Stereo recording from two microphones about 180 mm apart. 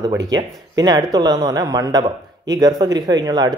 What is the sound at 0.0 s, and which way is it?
Speech, 20° right (ahead or behind).